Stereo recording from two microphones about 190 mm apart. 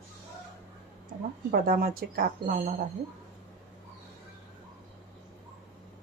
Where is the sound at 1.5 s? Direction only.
50° right (ahead or behind).